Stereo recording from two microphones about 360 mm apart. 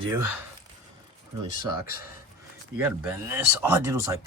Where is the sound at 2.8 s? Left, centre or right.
Centre.